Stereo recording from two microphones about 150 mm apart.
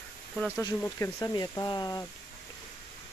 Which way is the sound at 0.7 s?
15° left (ahead or behind).